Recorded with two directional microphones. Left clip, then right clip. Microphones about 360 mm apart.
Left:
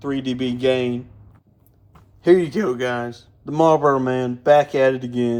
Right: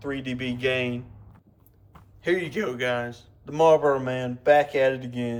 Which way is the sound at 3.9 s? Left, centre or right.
Left.